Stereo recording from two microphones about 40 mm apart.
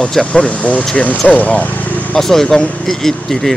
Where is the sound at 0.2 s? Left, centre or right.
Left.